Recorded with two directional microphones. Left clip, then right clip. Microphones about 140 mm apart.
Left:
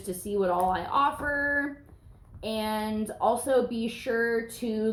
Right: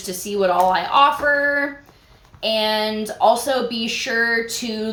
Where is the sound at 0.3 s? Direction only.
20° right (ahead or behind).